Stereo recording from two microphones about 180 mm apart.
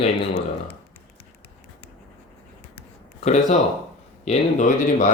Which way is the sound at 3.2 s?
40° left (ahead or behind).